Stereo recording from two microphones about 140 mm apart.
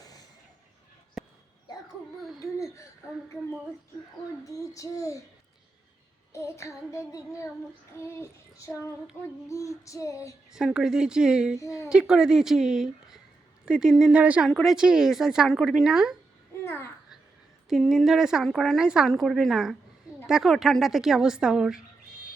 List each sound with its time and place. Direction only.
1.2 s a sound: centre (ahead or behind)
2.4 s a sound: 20° left (ahead or behind)
4.4 s child singing: 25° left (ahead or behind)
6.3 s child singing: 20° left (ahead or behind)
9.2 s a child's voice: 15° left (ahead or behind)
9.5 s child singing: 25° left (ahead or behind)
10.5 s a woman's voice: 5° right (ahead or behind)
16.6 s a child's voice: 15° left (ahead or behind)
17.7 s a woman's voice: centre (ahead or behind)